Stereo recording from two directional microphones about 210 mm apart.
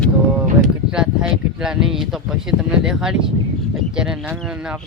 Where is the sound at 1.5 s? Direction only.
5° right (ahead or behind).